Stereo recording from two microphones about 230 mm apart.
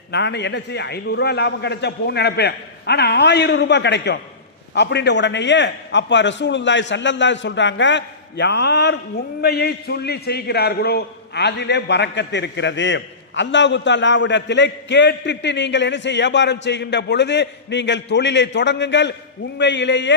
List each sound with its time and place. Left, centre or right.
0.1 s a man's voice: left